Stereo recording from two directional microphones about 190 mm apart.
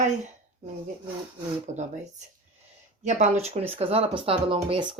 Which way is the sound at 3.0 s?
40° right (ahead or behind).